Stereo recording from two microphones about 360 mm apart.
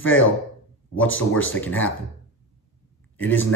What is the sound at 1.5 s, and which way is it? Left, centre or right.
Speech, centre.